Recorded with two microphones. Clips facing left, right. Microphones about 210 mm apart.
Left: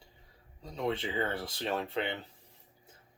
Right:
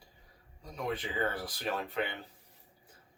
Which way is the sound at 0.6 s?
25° left (ahead or behind).